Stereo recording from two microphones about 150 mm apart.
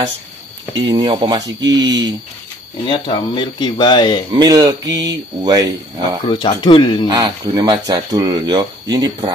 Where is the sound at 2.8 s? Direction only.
30° left (ahead or behind).